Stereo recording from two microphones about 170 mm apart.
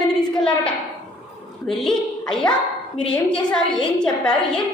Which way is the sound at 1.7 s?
Centre (ahead or behind).